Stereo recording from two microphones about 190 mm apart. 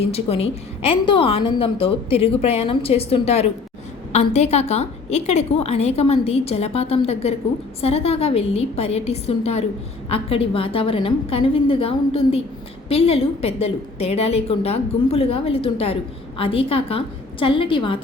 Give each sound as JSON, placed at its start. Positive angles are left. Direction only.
{"t": 0.0, "sound": "a woman's voice", "side_deg": 30}